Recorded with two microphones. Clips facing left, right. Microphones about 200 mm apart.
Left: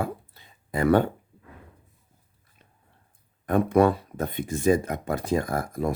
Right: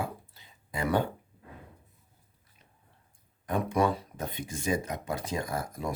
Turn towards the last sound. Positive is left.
turn(degrees=55)  # may be behind; listen again after turning